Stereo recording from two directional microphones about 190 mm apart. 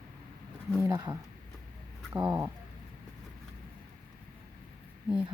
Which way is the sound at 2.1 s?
15° right (ahead or behind).